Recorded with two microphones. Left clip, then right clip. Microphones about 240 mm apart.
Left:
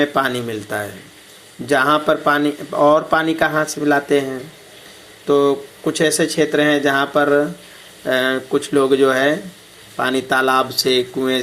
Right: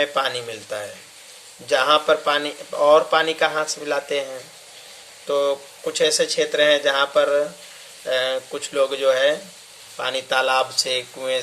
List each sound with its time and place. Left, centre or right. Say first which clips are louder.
0.0 s speech: left 4 dB; centre
5.3 s speech: left 6 dB; centre